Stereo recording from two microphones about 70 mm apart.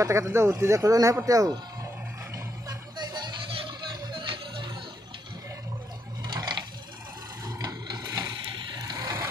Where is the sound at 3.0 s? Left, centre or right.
Right.